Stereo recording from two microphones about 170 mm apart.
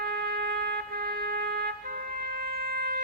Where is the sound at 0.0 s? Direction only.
70° right (ahead or behind).